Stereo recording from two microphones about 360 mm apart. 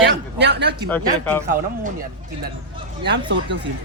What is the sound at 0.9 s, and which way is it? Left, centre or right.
Speech, centre.